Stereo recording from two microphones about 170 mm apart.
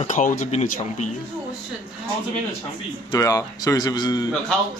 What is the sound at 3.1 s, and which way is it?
Speech, 20° left (ahead or behind).